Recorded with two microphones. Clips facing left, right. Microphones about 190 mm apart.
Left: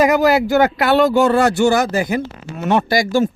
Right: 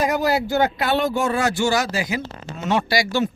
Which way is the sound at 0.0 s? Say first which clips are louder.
Left 7 dB; 90° left.